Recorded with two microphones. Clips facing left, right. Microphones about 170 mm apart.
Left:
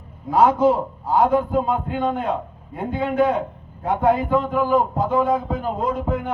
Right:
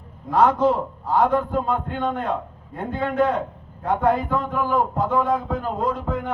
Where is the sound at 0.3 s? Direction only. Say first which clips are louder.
Left 2 dB; 5° left (ahead or behind).